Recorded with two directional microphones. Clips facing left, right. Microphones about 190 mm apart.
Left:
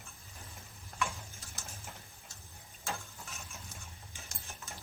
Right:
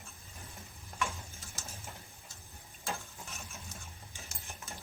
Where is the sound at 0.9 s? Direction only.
Centre (ahead or behind).